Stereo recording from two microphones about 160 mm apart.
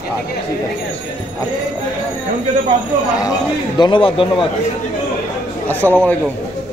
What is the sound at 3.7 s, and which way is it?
Speech, 30° left (ahead or behind).